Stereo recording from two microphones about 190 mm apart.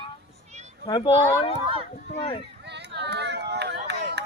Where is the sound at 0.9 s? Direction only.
25° left (ahead or behind).